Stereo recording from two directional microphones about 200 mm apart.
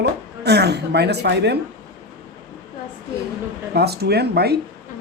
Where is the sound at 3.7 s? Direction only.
55° right (ahead or behind).